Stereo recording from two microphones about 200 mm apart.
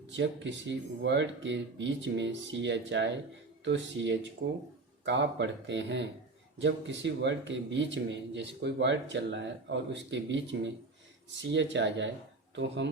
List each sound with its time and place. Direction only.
0.1 s a man's voice: 65° right (ahead or behind)